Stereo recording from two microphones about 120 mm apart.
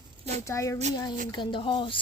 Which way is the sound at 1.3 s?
40° left (ahead or behind).